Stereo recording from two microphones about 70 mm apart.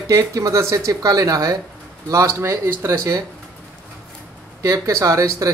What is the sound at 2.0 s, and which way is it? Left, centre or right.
Speech, right.